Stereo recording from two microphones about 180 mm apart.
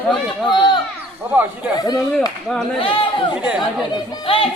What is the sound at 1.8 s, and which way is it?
A man's voice, 20° left (ahead or behind).